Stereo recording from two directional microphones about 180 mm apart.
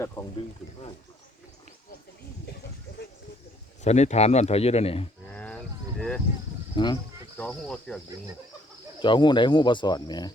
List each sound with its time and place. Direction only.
0.2 s speech: 25° left (ahead or behind)
3.8 s speech: 40° left (ahead or behind)
5.2 s a sound: 5° left (ahead or behind)
6.7 s speech: 25° left (ahead or behind)
7.3 s speech: 10° left (ahead or behind)
9.0 s speech: 25° left (ahead or behind)